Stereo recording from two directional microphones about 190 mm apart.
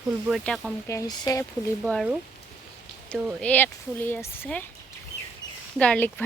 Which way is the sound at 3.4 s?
10° left (ahead or behind).